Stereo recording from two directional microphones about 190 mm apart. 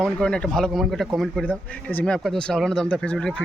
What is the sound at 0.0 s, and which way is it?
Speech, 5° left (ahead or behind).